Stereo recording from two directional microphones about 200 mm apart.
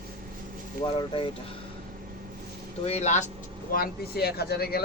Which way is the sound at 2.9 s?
35° left (ahead or behind).